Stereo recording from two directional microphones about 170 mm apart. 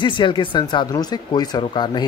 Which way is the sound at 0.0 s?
30° left (ahead or behind).